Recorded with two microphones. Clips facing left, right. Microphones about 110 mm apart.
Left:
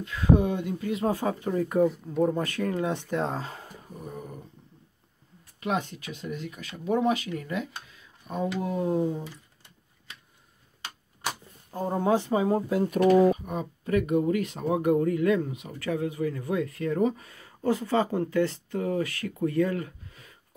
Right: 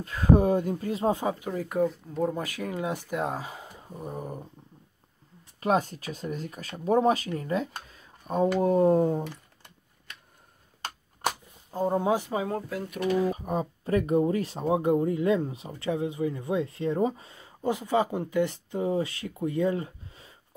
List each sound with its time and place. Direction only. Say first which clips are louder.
0.0 s speech: right 1 dB; 40° right (ahead or behind)
1.4 s speech: left 3 dB; centre (ahead or behind)
3.9 s speech: right 4 dB; 35° right (ahead or behind)
5.6 s speech: right 4 dB; 40° right (ahead or behind)
8.5 s typing: right 7 dB; 40° right (ahead or behind); by 10.1 s 55° right (ahead or behind)
11.7 s speech: even; 15° right (ahead or behind)
12.4 s speech: left 7 dB; 15° left (ahead or behind)
12.8 s speech: left 7 dB; 40° left (ahead or behind)
13.4 s speech: right 3 dB; 30° right (ahead or behind)